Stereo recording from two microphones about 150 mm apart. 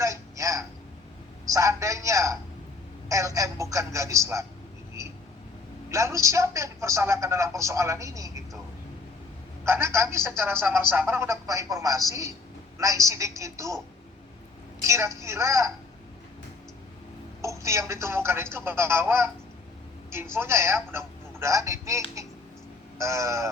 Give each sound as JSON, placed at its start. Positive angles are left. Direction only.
{"t": 0.0, "sound": "a sound", "side_deg": -20}
{"t": 1.5, "sound": "a man's voice", "side_deg": -20}
{"t": 5.9, "sound": "a man's voice", "side_deg": -20}
{"t": 9.6, "sound": "a man's voice", "side_deg": -15}
{"t": 14.8, "sound": "a man's voice", "side_deg": -20}
{"t": 17.4, "sound": "a woman's voice", "side_deg": -20}